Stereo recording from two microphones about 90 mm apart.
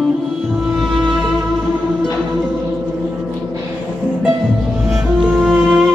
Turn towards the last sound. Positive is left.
turn(degrees=-15)  # may be behind; listen again after turning